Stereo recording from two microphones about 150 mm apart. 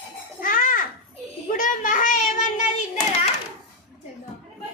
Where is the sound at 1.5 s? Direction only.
60° left (ahead or behind).